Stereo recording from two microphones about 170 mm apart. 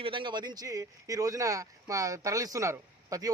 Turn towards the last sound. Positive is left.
turn(degrees=-20)  # may be behind; listen again after turning